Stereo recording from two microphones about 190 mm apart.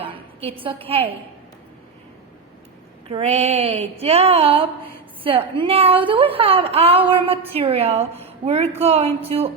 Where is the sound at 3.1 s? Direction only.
30° right (ahead or behind).